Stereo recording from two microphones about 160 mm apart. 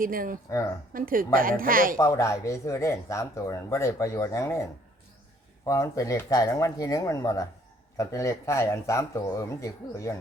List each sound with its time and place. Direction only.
0.0 s a woman's voice: 60° right (ahead or behind)
2.0 s speech: 20° left (ahead or behind)